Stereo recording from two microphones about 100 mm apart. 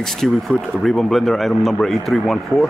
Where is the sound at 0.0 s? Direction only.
5° left (ahead or behind).